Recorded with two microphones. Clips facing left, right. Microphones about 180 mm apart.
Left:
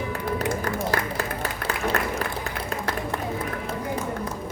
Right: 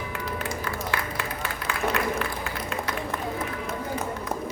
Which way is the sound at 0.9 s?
40° left (ahead or behind).